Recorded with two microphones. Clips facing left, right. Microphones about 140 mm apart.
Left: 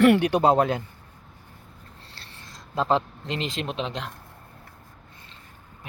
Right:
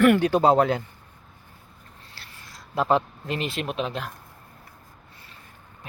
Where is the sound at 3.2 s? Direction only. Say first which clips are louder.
Right 1 dB; 25° left (ahead or behind).